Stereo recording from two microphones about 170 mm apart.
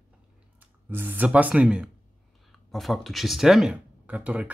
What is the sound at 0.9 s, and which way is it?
Speech, 10° right (ahead or behind).